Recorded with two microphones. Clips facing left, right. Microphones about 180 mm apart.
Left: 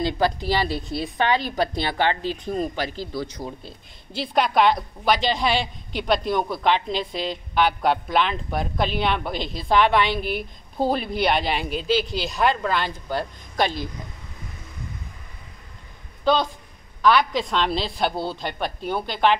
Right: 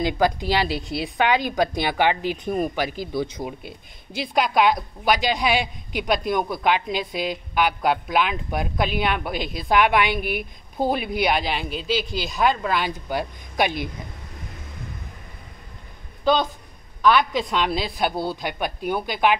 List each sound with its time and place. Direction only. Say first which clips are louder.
0.0 s a woman's voice: right 1 dB; 15° right (ahead or behind)
4.3 s a woman's voice: even; 5° right (ahead or behind)
17.4 s a woman's voice: even; 10° right (ahead or behind)